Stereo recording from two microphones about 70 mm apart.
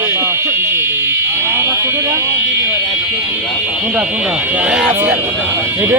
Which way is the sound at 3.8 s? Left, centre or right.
Right.